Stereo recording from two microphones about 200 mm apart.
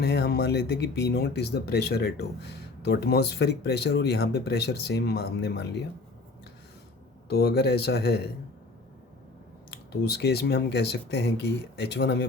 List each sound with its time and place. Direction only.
0.0 s speech: 55° left (ahead or behind)
7.3 s speech: 50° left (ahead or behind)
9.6 s speech: 55° left (ahead or behind)